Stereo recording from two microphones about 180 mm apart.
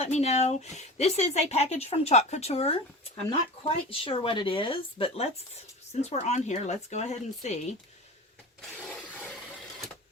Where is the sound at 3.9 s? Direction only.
30° left (ahead or behind).